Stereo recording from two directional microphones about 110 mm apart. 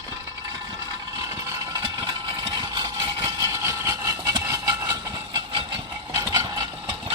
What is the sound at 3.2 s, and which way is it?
Engine, 25° right (ahead or behind).